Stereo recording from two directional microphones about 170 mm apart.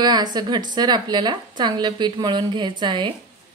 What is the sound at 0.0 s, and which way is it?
A woman's voice, 25° right (ahead or behind).